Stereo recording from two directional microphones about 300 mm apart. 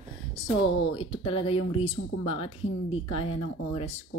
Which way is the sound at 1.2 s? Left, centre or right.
Centre.